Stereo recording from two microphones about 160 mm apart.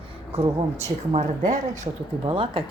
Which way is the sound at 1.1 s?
50° right (ahead or behind).